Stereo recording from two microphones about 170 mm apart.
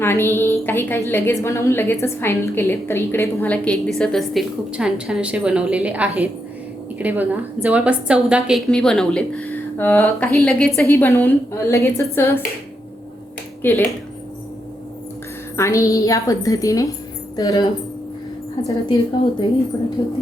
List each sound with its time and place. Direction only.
0.0 s a woman's voice: 15° left (ahead or behind)
13.6 s speech: 15° left (ahead or behind)
15.5 s a woman's voice: 15° left (ahead or behind)
20.0 s a woman's voice: 25° left (ahead or behind)